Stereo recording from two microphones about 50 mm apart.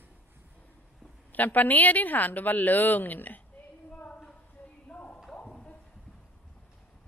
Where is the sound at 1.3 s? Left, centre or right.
Left.